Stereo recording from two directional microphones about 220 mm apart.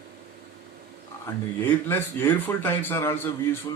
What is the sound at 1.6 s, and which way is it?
A man's voice, 10° left (ahead or behind).